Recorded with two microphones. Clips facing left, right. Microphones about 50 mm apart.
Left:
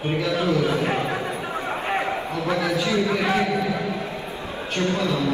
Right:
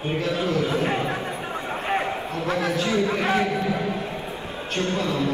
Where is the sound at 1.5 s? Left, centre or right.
Centre.